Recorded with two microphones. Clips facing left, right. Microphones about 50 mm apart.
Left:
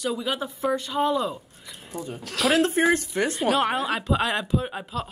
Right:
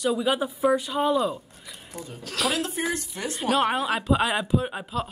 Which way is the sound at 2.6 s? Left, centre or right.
Left.